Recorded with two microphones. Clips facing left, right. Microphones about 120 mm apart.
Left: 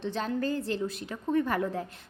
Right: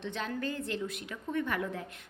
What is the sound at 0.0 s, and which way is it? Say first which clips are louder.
A woman's voice: left 5 dB; 35° left (ahead or behind).